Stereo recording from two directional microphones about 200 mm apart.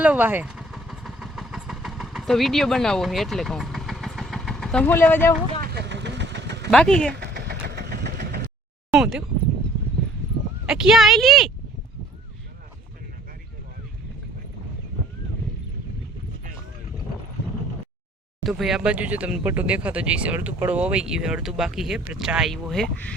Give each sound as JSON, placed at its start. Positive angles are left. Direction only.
{"t": 0.0, "sound": "vehicle", "side_deg": -10}
{"t": 5.6, "sound": "vehicle", "side_deg": -55}
{"t": 6.7, "sound": "speech", "side_deg": 5}
{"t": 7.2, "sound": "vehicle", "side_deg": -55}
{"t": 8.9, "sound": "speech", "side_deg": -5}
{"t": 10.7, "sound": "speech", "side_deg": -5}
{"t": 18.4, "sound": "speech", "side_deg": 0}